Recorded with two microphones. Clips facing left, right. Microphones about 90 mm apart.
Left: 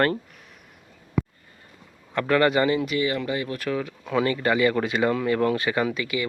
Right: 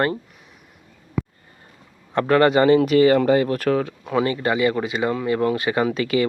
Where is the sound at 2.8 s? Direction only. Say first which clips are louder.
Right 10 dB; 50° right (ahead or behind); by 4.8 s 20° right (ahead or behind).